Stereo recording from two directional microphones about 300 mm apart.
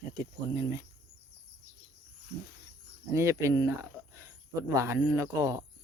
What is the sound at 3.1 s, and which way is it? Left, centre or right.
Speech, centre.